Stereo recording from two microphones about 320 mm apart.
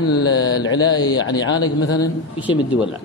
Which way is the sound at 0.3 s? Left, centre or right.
Left.